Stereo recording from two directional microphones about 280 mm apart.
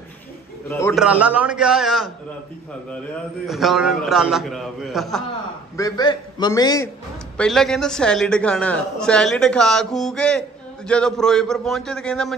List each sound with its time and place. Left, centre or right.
0.7 s a man's voice: centre
1.0 s a man's voice: centre
3.4 s a man's voice: centre
5.8 s a man's voice: centre
7.3 s a man's voice: centre